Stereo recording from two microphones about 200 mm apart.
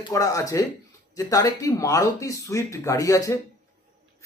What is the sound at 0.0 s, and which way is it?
Speech, 15° left (ahead or behind).